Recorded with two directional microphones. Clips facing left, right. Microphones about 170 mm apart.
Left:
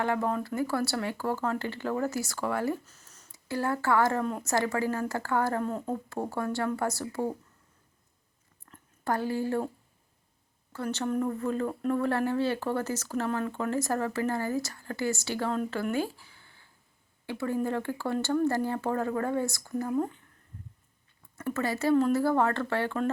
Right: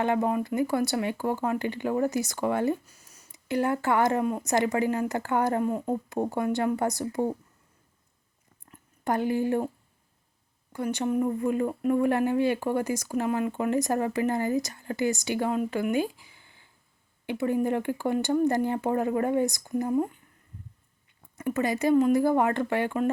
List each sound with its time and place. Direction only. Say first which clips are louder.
0.0 s speech: right 3 dB; 20° right (ahead or behind)
8.7 s a sound: right 3 dB; 20° right (ahead or behind)
10.7 s speech: right 3 dB; 15° right (ahead or behind)
21.3 s speech: right 3 dB; 15° right (ahead or behind)